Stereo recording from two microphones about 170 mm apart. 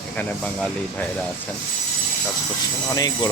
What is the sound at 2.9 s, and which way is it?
Speech, 20° left (ahead or behind).